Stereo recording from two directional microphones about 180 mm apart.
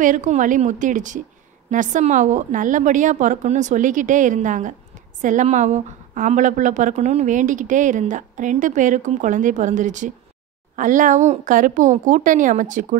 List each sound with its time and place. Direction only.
0.0 s a woman's voice: 45° right (ahead or behind)